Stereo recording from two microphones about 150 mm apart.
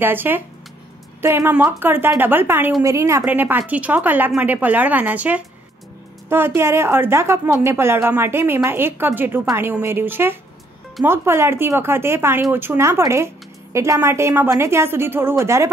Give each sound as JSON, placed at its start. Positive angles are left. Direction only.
{"t": 0.0, "sound": "a woman's voice", "side_deg": -15}